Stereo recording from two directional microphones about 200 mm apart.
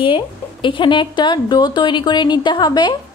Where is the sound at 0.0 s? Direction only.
25° left (ahead or behind).